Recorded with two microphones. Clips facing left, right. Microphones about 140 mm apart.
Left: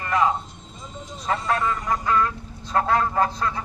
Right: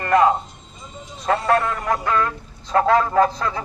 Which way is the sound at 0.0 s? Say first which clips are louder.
Right 6 dB; 60° right (ahead or behind).